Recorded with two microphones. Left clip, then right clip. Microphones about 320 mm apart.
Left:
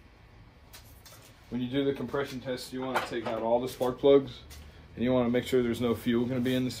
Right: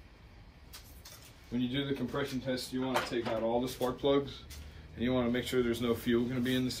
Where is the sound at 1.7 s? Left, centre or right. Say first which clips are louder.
Left 8 dB; left.